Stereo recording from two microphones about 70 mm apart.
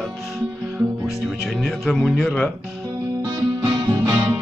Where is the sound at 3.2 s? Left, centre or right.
Right.